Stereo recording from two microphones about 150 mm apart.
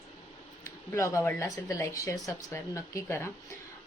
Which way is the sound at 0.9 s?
20° left (ahead or behind).